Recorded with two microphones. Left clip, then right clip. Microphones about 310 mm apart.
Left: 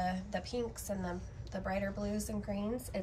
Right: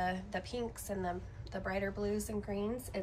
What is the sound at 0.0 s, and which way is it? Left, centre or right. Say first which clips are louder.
A woman's voice: even; centre.